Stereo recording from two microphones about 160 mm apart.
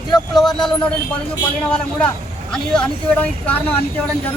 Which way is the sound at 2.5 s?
5° left (ahead or behind).